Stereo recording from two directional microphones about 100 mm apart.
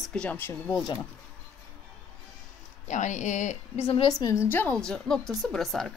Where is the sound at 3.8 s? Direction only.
70° left (ahead or behind).